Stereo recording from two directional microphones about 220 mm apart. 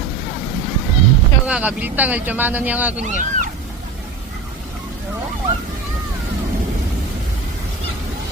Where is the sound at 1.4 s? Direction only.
5° right (ahead or behind).